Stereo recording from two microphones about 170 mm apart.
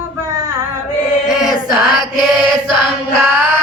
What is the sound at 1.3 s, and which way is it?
Choir, centre (ahead or behind).